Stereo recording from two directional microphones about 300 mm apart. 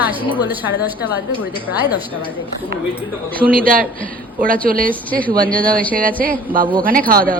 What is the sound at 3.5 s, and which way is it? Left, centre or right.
A man's voice, right.